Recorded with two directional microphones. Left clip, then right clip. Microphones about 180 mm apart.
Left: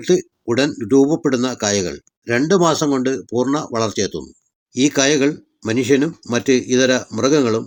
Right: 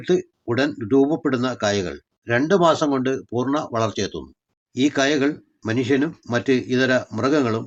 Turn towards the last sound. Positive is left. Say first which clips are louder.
# left 4 dB
turn(degrees=20)  # may be behind; listen again after turning